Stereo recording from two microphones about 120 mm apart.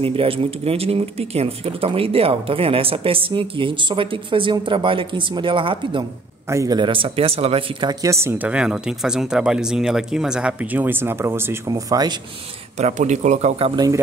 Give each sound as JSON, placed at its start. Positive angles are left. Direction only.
{"t": 0.0, "sound": "speech", "side_deg": -50}
{"t": 6.5, "sound": "a man's voice", "side_deg": -25}
{"t": 6.8, "sound": "speech", "side_deg": -45}
{"t": 7.8, "sound": "speech", "side_deg": -30}
{"t": 11.6, "sound": "speech", "side_deg": -30}
{"t": 12.7, "sound": "speech", "side_deg": -75}